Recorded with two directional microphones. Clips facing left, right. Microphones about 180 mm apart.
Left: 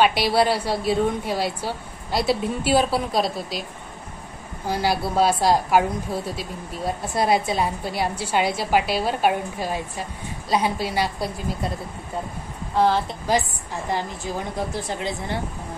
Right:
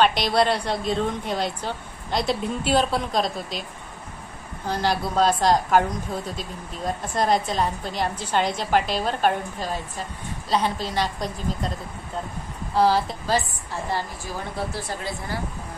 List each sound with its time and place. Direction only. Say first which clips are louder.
0.0 s a woman's voice: left 1 dB; 5° left (ahead or behind)
4.6 s a woman's voice: left 1 dB; 10° left (ahead or behind)
12.7 s a woman's voice: even; centre (ahead or behind)
13.3 s a woman's voice: left 2 dB; 15° left (ahead or behind)